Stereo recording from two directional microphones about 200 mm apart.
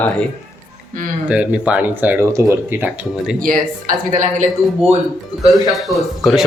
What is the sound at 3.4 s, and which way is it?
Speech, 40° right (ahead or behind).